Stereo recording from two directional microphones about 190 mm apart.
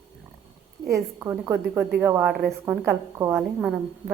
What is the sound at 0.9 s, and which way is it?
A woman's voice, 15° right (ahead or behind).